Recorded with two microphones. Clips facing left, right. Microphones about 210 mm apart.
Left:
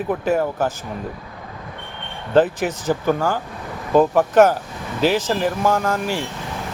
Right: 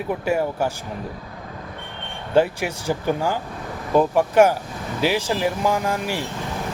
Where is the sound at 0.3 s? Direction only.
10° right (ahead or behind).